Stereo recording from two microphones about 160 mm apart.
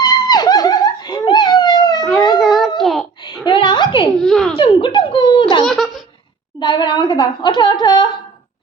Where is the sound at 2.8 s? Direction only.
Centre (ahead or behind).